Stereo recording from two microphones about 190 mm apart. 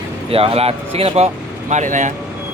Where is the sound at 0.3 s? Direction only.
30° right (ahead or behind).